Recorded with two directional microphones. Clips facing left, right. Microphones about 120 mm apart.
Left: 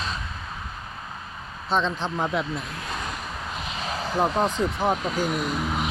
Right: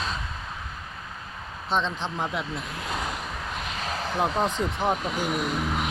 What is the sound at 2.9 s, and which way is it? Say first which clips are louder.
Vehicle: right 2 dB; 15° right (ahead or behind).